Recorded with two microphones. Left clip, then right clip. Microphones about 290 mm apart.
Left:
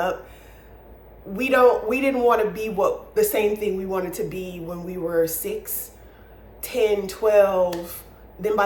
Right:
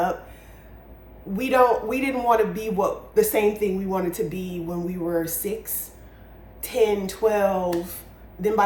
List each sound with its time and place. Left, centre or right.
1.4 s a man's voice: centre